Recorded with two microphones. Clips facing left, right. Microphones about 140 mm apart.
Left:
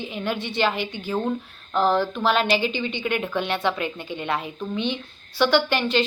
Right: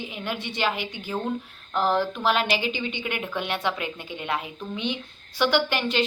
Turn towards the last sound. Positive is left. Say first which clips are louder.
# left 3 dB
turn(degrees=-10)  # may be behind; listen again after turning